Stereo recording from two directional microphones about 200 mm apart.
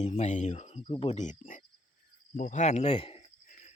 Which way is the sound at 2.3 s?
40° left (ahead or behind).